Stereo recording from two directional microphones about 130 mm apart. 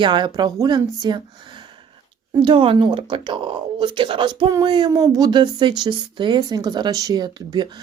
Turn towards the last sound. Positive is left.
turn(degrees=-30)  # may be behind; listen again after turning